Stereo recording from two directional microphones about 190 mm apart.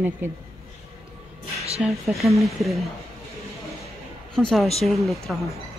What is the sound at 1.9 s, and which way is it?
Speech, centre (ahead or behind).